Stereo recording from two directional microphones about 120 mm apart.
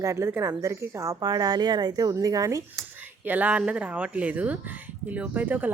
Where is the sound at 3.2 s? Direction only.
15° right (ahead or behind).